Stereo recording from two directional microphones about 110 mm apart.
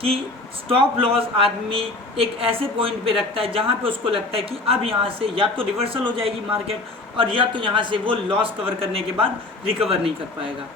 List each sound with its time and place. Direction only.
0.7 s a man's voice: 55° right (ahead or behind)